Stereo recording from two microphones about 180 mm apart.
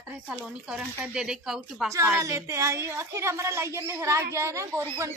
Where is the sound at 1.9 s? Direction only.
15° right (ahead or behind).